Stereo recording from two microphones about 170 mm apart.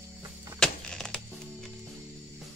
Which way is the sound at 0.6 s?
5° left (ahead or behind).